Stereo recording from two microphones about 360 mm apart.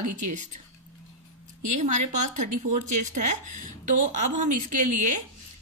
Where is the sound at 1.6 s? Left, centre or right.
Centre.